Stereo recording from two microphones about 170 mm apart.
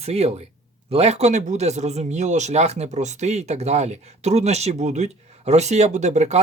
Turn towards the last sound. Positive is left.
turn(degrees=-40)  # may be behind; listen again after turning